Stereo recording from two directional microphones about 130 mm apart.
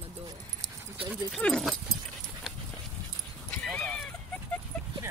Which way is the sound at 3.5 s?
10° left (ahead or behind).